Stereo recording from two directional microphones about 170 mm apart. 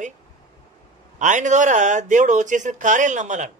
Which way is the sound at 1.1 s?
45° right (ahead or behind).